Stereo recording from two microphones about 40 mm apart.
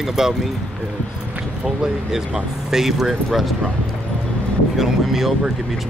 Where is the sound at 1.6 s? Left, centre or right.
Centre.